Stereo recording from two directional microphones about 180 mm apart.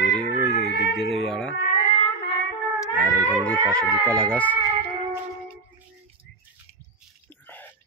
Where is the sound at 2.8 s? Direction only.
10° left (ahead or behind).